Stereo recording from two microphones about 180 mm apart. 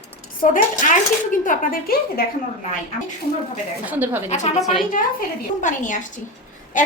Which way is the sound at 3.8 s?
10° right (ahead or behind).